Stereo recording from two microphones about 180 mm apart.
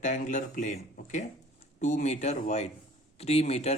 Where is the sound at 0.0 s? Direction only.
45° left (ahead or behind).